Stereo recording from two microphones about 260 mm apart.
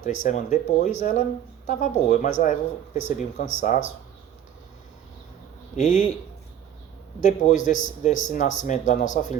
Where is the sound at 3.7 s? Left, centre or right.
Left.